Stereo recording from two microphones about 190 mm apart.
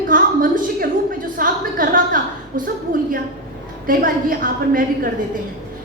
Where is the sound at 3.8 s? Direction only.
45° right (ahead or behind).